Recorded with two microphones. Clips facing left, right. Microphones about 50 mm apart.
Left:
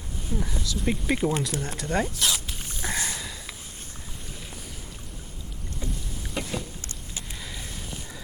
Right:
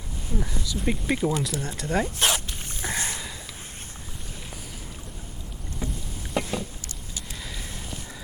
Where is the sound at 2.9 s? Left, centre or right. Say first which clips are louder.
Even; right.